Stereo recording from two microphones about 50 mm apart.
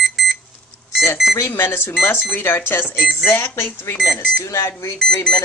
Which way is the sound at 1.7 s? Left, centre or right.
Left.